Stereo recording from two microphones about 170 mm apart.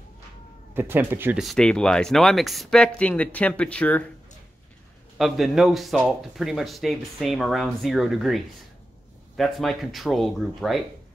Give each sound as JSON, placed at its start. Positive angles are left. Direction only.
{"t": 0.7, "sound": "speech", "side_deg": -10}
{"t": 1.4, "sound": "speech", "side_deg": 5}
{"t": 5.1, "sound": "speech", "side_deg": 0}
{"t": 9.4, "sound": "speech", "side_deg": 0}